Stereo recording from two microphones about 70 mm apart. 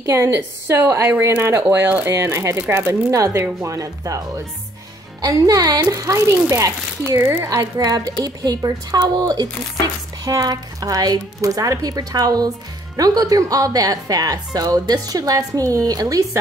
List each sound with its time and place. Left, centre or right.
0.0 s a woman's voice: right
2.0 s a woman's voice: right
5.2 s a woman's voice: right
7.4 s a woman's voice: right